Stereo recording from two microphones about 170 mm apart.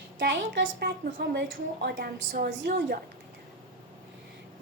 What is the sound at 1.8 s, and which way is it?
A woman's voice, 60° right (ahead or behind).